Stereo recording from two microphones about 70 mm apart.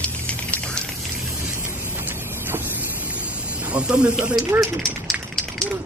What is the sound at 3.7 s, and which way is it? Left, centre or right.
Speech, centre.